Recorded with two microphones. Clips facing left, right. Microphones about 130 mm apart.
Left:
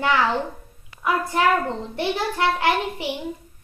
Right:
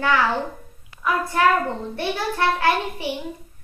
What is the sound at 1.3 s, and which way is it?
A child's voice, 20° left (ahead or behind).